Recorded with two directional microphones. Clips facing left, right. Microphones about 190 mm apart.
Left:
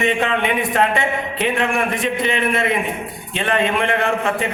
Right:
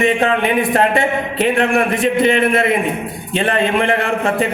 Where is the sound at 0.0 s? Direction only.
35° right (ahead or behind).